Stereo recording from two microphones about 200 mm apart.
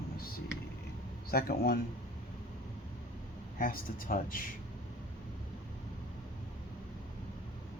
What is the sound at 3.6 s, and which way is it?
Speech, 45° left (ahead or behind).